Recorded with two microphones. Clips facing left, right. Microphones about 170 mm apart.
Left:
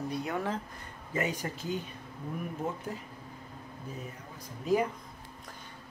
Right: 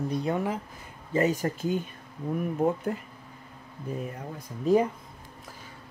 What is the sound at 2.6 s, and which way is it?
Speech, 60° right (ahead or behind).